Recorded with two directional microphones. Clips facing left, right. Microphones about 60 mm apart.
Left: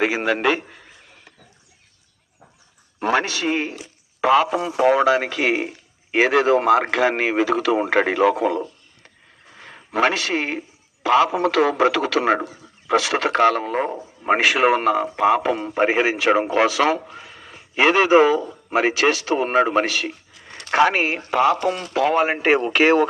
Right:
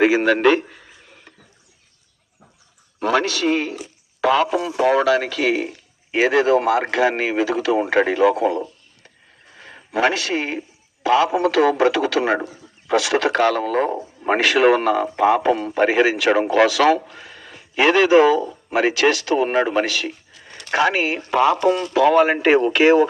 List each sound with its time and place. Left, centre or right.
0.0 s a sound: centre
3.0 s a man's voice: left
6.1 s speech: left
9.9 s a man's voice: left